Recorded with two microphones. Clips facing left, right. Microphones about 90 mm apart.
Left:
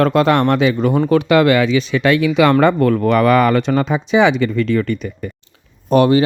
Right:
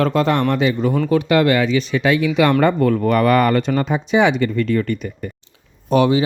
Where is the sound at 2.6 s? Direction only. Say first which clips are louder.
Left 2 dB; 75° left (ahead or behind).